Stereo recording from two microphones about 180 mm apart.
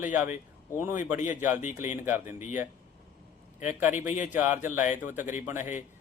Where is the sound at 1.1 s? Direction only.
45° left (ahead or behind).